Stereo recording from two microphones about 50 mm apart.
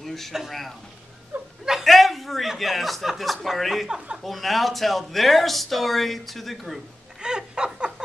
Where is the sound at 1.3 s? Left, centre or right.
Right.